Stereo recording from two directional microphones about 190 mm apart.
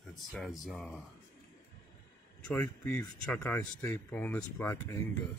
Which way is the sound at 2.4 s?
10° left (ahead or behind).